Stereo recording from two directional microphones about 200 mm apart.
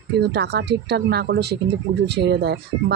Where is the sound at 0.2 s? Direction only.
55° right (ahead or behind).